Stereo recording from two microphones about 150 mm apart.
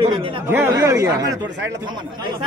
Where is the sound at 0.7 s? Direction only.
20° right (ahead or behind).